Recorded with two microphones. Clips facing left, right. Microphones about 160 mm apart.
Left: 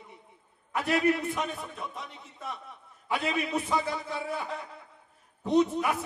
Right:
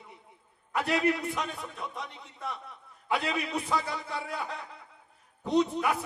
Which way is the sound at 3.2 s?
20° left (ahead or behind).